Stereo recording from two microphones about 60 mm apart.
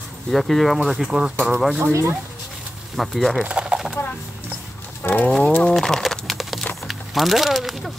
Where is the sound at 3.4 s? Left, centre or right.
Centre.